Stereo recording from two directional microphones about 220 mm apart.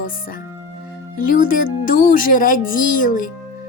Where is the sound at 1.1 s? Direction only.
40° left (ahead or behind).